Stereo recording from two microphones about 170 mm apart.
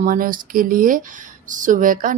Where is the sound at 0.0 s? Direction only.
55° right (ahead or behind).